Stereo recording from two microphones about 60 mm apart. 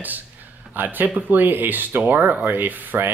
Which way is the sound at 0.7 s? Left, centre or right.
Right.